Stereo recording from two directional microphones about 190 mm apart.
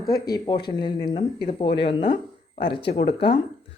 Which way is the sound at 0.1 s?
20° left (ahead or behind).